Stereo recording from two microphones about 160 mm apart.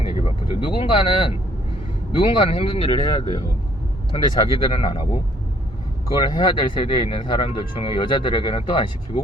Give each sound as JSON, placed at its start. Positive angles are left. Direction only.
{"t": 0.1, "sound": "speech", "side_deg": 35}